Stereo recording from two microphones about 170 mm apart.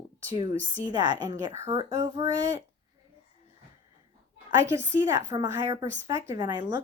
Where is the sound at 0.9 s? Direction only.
25° right (ahead or behind).